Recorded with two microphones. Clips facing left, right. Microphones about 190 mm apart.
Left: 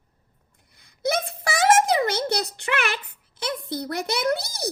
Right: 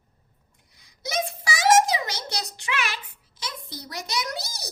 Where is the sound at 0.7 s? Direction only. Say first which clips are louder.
Left 11 dB; 55° left (ahead or behind).